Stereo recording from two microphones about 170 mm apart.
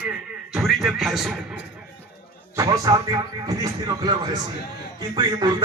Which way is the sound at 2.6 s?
20° right (ahead or behind).